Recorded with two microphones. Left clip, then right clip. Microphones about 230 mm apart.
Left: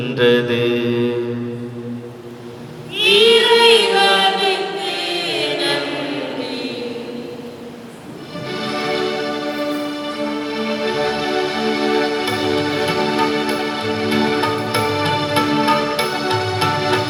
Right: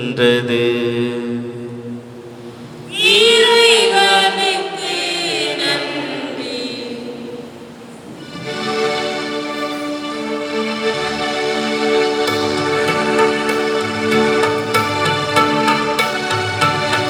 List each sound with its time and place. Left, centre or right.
0.0 s mantra: right
2.9 s chant: right
8.4 s music: right